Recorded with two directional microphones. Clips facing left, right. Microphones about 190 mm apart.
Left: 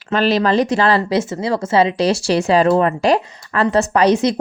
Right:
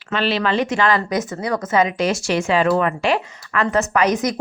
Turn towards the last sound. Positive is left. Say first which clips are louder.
# left 4 dB
turn(degrees=30)  # may be behind; listen again after turning